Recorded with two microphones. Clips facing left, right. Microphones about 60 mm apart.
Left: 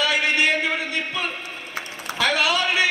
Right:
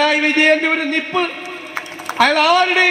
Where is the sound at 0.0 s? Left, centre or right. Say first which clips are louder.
Right 6 dB; right.